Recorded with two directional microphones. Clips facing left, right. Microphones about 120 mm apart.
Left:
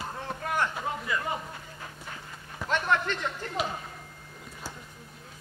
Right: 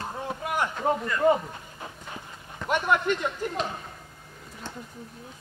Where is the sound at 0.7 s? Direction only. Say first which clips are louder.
Right 5 dB; 5° left (ahead or behind).